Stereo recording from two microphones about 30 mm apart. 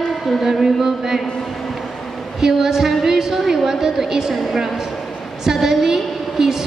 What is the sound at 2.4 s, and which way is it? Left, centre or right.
A woman's voice, centre.